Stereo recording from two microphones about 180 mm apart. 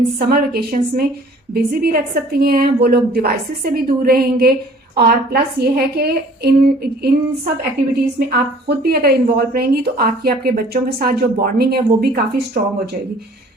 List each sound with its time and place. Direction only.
0.2 s a woman's voice: 55° right (ahead or behind)